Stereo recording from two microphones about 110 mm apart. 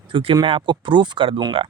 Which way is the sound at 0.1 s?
55° right (ahead or behind).